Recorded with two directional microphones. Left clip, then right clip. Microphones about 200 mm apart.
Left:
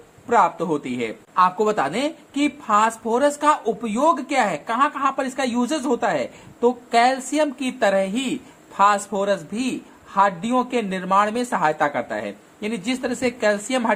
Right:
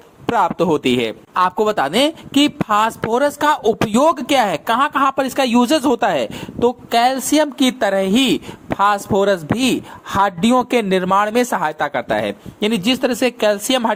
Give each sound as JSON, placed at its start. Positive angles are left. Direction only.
{"t": 0.3, "sound": "speech", "side_deg": -40}